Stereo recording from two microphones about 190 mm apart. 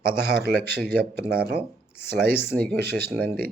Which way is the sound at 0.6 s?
55° right (ahead or behind).